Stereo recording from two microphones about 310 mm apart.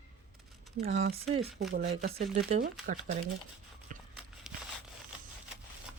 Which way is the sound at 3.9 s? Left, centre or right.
Right.